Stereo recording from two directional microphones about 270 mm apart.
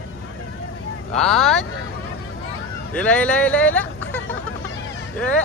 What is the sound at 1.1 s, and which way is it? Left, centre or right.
Speech, centre.